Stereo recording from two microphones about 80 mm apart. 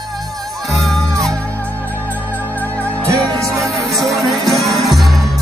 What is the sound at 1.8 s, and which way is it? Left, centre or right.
Music, right.